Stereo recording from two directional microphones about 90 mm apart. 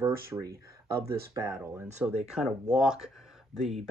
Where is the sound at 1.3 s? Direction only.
35° right (ahead or behind).